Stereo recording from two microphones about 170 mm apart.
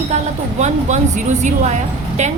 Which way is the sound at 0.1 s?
40° right (ahead or behind).